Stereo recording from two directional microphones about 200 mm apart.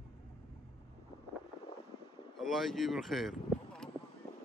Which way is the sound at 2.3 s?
Centre (ahead or behind).